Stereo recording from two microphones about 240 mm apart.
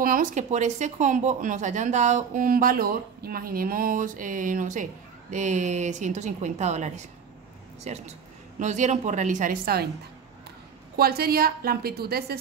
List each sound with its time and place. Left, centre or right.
0.0 s speech: right
11.0 s speech: right